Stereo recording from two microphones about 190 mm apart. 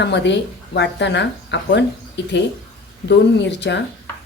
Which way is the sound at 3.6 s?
65° left (ahead or behind).